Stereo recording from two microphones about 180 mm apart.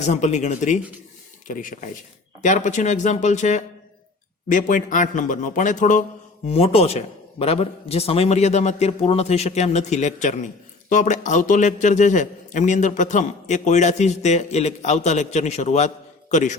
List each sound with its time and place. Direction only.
0.0 s a man's voice: 40° left (ahead or behind)
6.5 s a man's voice: 35° left (ahead or behind)